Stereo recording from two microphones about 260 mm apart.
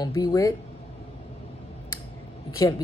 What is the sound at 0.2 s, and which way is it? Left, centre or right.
Speech, centre.